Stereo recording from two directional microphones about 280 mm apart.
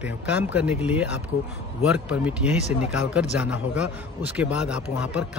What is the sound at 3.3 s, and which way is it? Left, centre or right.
A man's voice, centre.